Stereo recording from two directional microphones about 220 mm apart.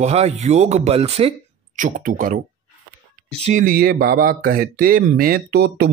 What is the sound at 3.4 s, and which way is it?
Speech, 40° right (ahead or behind).